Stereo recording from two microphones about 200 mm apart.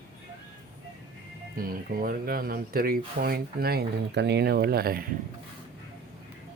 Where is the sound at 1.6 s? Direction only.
50° right (ahead or behind).